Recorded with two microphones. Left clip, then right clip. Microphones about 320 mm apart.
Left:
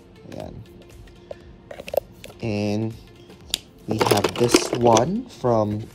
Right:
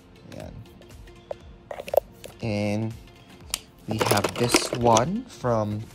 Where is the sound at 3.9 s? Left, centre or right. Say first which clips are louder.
Left 4 dB; centre.